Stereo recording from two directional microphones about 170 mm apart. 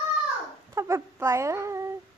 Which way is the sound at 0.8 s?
15° right (ahead or behind).